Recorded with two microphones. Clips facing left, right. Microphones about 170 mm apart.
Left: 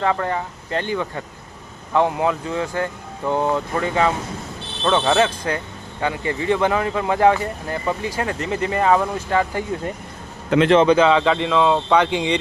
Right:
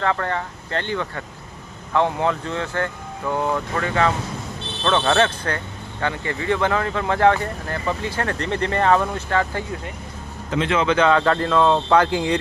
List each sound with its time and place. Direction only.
0.0 s speech: 15° left (ahead or behind)
10.5 s a man's voice: 65° left (ahead or behind)
10.8 s speech: 10° left (ahead or behind)